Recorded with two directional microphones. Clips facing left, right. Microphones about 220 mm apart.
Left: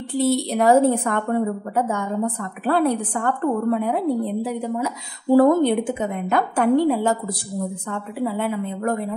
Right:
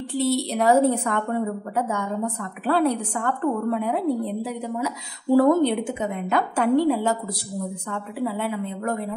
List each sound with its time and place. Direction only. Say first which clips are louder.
0.2 s a woman's voice: left 3 dB; 50° left (ahead or behind)
8.4 s a woman's voice: left 3 dB; 50° left (ahead or behind)